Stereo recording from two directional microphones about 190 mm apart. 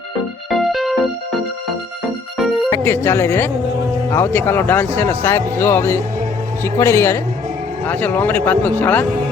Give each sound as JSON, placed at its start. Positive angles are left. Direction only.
{"t": 0.5, "sound": "music", "side_deg": 0}
{"t": 2.4, "sound": "music", "side_deg": 0}
{"t": 2.6, "sound": "speech", "side_deg": 15}